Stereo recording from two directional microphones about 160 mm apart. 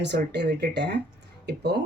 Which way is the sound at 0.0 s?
90° right.